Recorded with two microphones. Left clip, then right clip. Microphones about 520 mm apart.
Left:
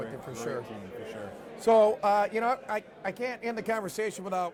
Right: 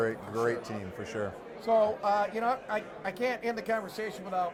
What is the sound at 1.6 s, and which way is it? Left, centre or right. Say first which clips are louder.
A man's voice: left 4 dB; left.